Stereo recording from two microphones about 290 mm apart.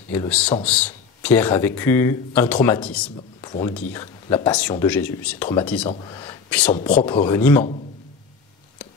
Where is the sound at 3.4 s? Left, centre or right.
Centre.